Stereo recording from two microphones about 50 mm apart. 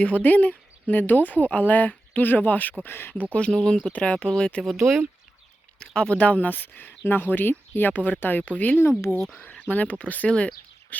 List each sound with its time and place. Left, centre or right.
0.0 s speech: left
2.8 s speech: left
3.3 s speech: centre
4.6 s speech: centre
5.8 s speech: centre
6.1 s speech: left
8.8 s speech: left
9.5 s speech: left